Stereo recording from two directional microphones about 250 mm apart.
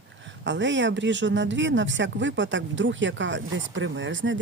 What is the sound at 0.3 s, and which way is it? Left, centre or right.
Speech, right.